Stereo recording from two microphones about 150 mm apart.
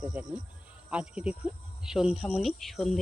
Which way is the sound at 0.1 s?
10° right (ahead or behind).